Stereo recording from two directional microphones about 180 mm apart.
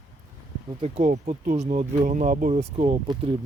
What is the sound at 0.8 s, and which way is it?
Speech, 40° right (ahead or behind).